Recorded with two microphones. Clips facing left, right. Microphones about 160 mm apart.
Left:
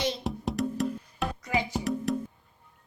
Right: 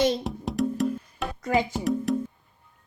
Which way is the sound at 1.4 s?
50° right (ahead or behind).